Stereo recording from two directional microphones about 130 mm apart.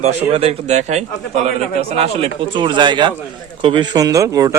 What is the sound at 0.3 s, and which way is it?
Speech, 50° right (ahead or behind).